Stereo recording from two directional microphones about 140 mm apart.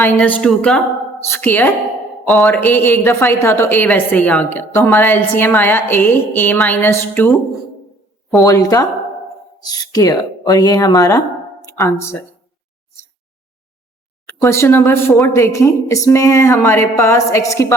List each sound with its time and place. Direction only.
0.0 s a woman's voice: 10° left (ahead or behind)
8.4 s speech: 25° left (ahead or behind)
14.4 s a woman's voice: 20° left (ahead or behind)